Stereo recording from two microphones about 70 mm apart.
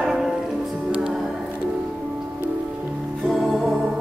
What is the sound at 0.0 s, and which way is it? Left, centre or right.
Music, centre.